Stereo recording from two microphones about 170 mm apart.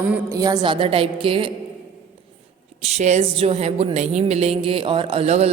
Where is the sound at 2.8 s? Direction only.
40° right (ahead or behind).